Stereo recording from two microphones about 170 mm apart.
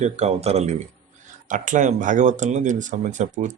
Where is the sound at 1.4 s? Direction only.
50° right (ahead or behind).